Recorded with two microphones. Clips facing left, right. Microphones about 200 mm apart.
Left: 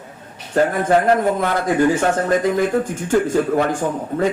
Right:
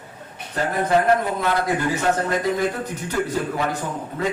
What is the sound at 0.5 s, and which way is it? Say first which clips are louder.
A man's voice: left 4 dB; 50° left (ahead or behind).